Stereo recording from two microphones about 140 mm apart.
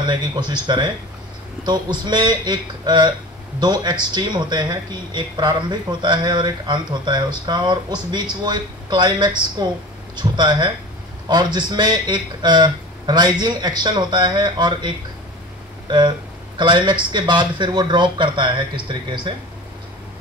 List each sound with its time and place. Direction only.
0.0 s speech: 30° right (ahead or behind)